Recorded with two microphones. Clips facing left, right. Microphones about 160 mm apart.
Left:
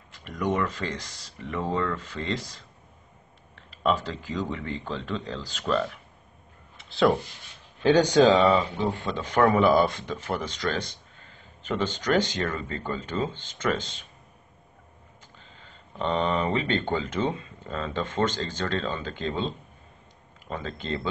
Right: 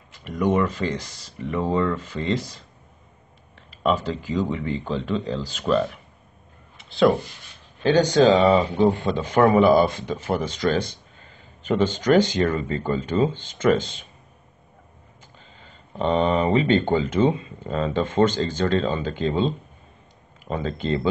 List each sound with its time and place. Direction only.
0.5 s speech: 10° right (ahead or behind)
3.8 s speech: 10° right (ahead or behind)
6.9 s rub: centre (ahead or behind)
7.8 s speech: 10° left (ahead or behind)
8.3 s speech: 10° right (ahead or behind)
16.0 s speech: 15° right (ahead or behind)